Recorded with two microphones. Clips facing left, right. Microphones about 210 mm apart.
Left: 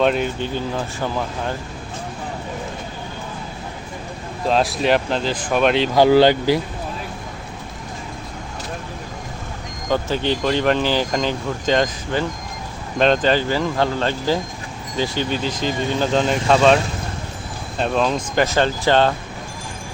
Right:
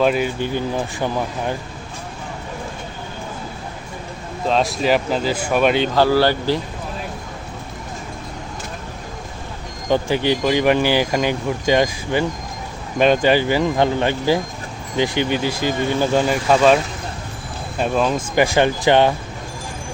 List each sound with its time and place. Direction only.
0.0 s speech: 5° right (ahead or behind)
4.4 s speech: centre (ahead or behind)
5.9 s speech: 15° left (ahead or behind)
9.9 s speech: 15° right (ahead or behind)